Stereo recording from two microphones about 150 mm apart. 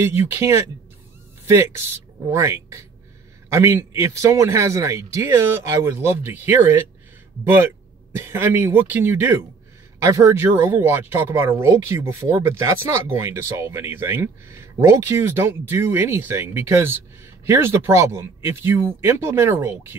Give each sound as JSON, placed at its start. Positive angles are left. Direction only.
{"t": 0.0, "sound": "speech", "side_deg": -15}